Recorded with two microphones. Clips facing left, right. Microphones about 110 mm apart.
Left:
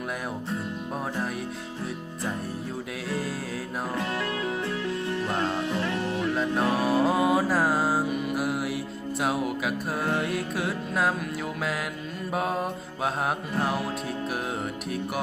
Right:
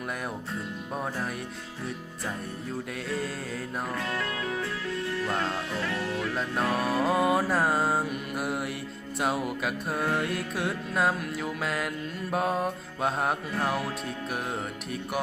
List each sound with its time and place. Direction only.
3.9 s music: 25° left (ahead or behind)
6.6 s music: centre (ahead or behind)
12.3 s music: centre (ahead or behind)